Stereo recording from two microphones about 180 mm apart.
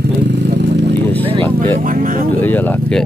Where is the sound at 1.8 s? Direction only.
50° right (ahead or behind).